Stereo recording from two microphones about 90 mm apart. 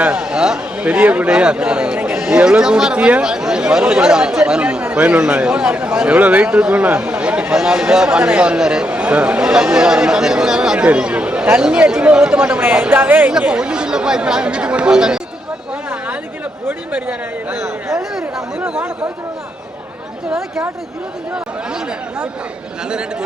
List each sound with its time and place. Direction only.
0.0 s a man's voice: 10° right (ahead or behind)
16.6 s a man's voice: 15° right (ahead or behind)
17.8 s speech: 5° right (ahead or behind)
21.3 s a man's voice: 10° right (ahead or behind)